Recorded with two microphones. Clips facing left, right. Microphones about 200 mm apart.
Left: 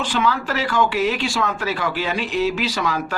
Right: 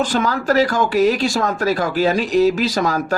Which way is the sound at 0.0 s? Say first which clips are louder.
Right 3 dB; 40° right (ahead or behind).